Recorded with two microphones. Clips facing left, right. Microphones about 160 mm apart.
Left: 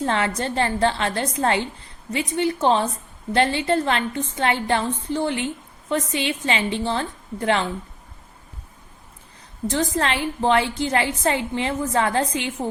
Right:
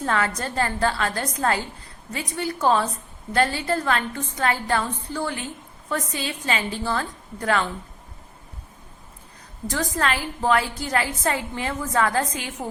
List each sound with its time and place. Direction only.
0.0 s a woman's voice: 25° left (ahead or behind)
9.6 s a woman's voice: 25° left (ahead or behind)